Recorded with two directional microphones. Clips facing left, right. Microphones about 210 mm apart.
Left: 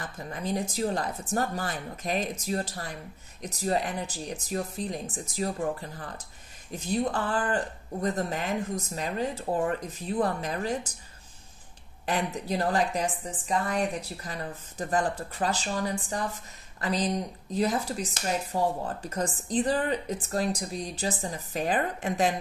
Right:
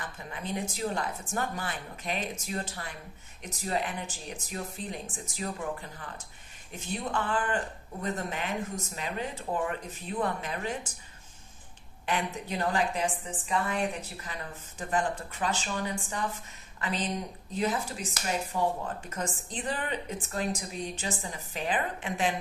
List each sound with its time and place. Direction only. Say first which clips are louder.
0.0 s speech: left 4 dB; 40° left (ahead or behind)
12.1 s speech: left 3 dB; 40° left (ahead or behind)